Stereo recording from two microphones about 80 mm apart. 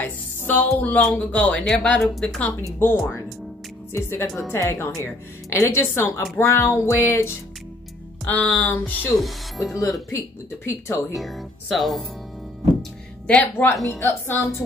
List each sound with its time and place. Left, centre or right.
0.0 s music: left
0.7 s speech: left
2.8 s a woman's voice: left
8.3 s speech: centre
8.6 s speech: left
9.2 s speech: centre
10.1 s a woman's voice: left
11.1 s speech: centre
13.3 s a woman's voice: left